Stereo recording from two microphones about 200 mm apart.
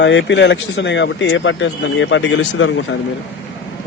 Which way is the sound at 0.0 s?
65° left (ahead or behind).